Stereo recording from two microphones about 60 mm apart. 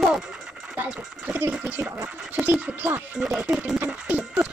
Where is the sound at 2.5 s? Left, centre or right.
Right.